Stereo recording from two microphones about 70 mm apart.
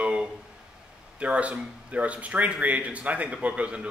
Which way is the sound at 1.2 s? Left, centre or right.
Centre.